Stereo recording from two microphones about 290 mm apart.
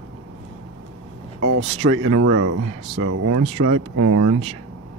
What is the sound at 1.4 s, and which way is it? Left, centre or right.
Speech, right.